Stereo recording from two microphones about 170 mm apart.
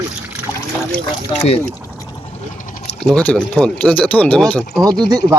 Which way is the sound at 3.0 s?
5° left (ahead or behind).